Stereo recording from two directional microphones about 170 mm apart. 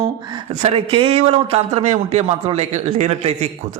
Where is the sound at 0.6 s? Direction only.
35° right (ahead or behind).